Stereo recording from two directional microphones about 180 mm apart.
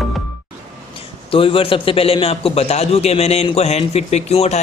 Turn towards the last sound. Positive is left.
turn(degrees=35)  # may be behind; listen again after turning